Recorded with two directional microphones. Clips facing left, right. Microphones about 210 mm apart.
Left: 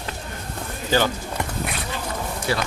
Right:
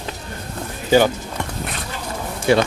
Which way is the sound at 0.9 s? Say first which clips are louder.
Right 6 dB; 15° right (ahead or behind).